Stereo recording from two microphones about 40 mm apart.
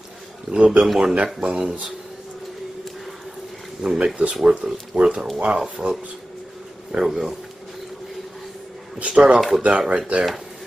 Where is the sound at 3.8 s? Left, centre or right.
Right.